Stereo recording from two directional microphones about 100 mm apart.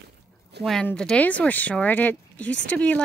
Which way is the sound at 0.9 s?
10° left (ahead or behind).